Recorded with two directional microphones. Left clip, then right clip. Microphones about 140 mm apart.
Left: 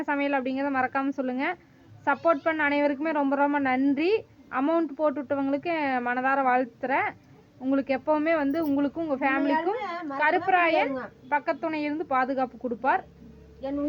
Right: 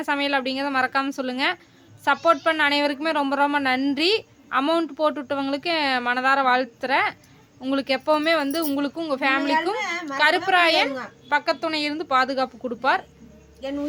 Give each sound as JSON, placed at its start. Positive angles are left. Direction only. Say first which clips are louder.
{"t": 0.0, "sound": "speech", "louder": "right 4 dB", "side_deg": -15}